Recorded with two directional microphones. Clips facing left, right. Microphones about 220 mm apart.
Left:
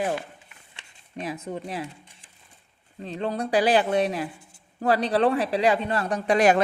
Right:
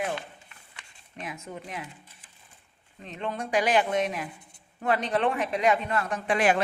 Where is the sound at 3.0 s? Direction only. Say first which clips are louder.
Left 5 dB; 35° left (ahead or behind).